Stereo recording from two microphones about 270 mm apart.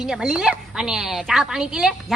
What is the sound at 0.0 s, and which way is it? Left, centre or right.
A woman's voice, centre.